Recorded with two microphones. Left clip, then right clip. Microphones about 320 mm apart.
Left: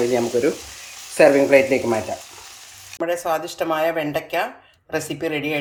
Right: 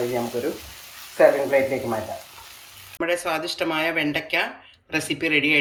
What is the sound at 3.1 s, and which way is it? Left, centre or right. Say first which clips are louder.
Speech: left 2 dB; left.